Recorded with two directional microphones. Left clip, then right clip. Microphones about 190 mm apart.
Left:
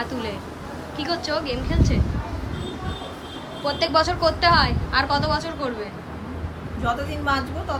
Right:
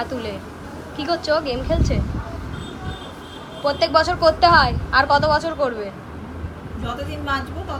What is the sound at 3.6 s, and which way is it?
A woman's voice, 10° left (ahead or behind).